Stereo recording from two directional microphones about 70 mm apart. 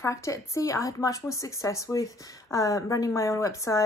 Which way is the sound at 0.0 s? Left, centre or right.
Left.